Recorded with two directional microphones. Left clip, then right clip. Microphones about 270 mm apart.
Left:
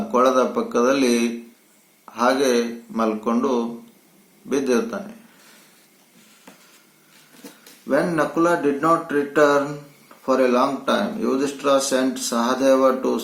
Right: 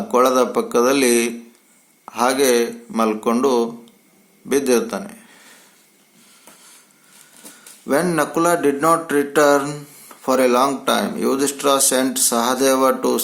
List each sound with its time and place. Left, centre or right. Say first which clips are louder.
0.1 s speech: right 2 dB; right
7.9 s speech: right 2 dB; right